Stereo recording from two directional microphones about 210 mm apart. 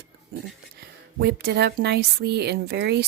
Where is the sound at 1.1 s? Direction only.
50° right (ahead or behind).